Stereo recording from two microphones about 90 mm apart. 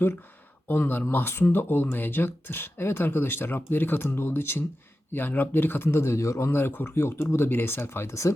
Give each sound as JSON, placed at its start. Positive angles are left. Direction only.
{"t": 0.7, "sound": "speech", "side_deg": 25}